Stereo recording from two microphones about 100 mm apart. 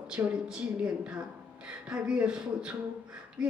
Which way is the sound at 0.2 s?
25° right (ahead or behind).